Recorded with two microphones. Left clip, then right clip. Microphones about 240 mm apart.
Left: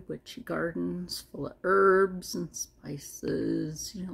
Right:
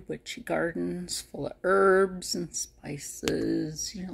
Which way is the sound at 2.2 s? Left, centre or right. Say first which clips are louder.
Right 3 dB; left.